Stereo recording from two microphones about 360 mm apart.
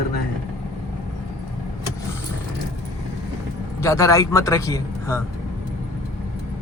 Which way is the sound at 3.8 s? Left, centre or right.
Centre.